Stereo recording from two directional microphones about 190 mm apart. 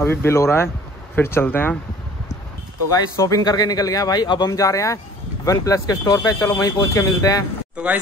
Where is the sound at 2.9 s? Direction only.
15° left (ahead or behind).